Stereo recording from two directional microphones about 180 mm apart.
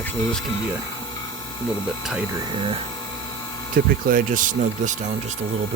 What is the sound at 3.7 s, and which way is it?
Speech, 50° right (ahead or behind).